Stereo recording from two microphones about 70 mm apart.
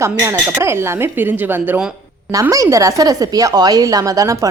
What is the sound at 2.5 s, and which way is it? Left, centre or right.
A woman's voice, right.